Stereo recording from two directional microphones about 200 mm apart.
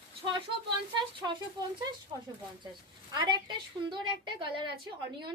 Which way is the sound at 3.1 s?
20° right (ahead or behind).